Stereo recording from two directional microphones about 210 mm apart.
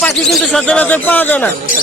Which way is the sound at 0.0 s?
5° left (ahead or behind).